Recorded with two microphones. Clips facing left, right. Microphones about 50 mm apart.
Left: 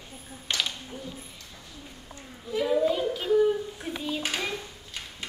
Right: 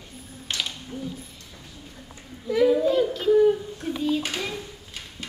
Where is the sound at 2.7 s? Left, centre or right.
Centre.